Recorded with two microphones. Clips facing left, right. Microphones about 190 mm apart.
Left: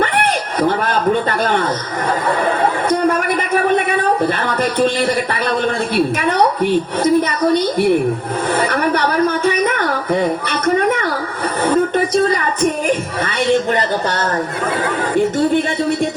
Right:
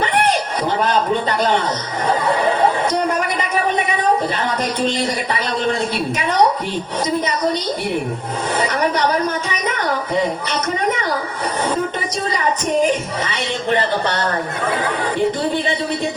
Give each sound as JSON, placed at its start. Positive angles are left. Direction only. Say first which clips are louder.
{"t": 0.9, "sound": "speech", "louder": "left 2 dB", "side_deg": 55}
{"t": 3.2, "sound": "a woman's voice", "louder": "left 3 dB", "side_deg": 55}
{"t": 6.1, "sound": "a woman's voice", "louder": "left 2 dB", "side_deg": 55}
{"t": 11.6, "sound": "a sound", "louder": "left 8 dB", "side_deg": 55}
{"t": 13.2, "sound": "speech", "louder": "left 10 dB", "side_deg": 45}